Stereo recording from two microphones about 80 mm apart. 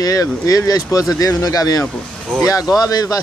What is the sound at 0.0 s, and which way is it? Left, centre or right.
Speech, left.